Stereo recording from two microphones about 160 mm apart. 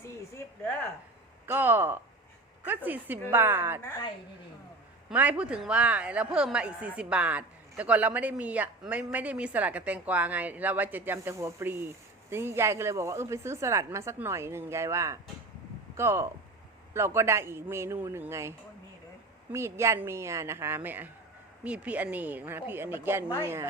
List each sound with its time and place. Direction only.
0.0 s a sound: 15° left (ahead or behind)
1.5 s speech: 15° right (ahead or behind)
5.0 s speech: 10° right (ahead or behind)
19.5 s speech: 15° right (ahead or behind)